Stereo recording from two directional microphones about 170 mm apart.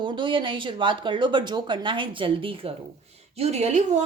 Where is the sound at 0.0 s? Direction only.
30° right (ahead or behind).